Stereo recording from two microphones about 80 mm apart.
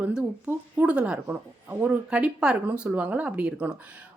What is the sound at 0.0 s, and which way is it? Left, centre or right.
A woman's voice, centre.